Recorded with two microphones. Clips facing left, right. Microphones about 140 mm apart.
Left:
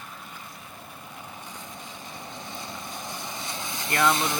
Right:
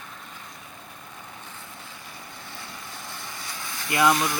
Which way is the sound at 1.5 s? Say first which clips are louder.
Left 2 dB; 15° left (ahead or behind).